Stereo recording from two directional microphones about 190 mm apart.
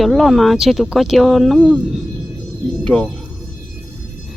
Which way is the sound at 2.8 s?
5° left (ahead or behind).